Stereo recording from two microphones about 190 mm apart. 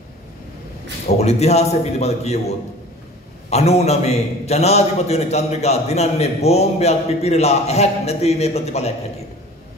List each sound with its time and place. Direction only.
1.0 s a man's voice: 35° left (ahead or behind)